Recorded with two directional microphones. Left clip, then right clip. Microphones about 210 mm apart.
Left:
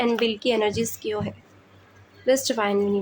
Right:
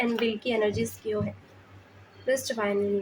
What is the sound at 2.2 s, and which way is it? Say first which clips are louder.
Speech: left 6 dB; 35° left (ahead or behind).